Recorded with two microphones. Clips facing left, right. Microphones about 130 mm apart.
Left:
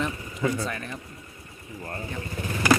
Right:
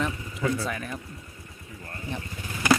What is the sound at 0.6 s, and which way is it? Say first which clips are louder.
Speech: even; 5° right (ahead or behind).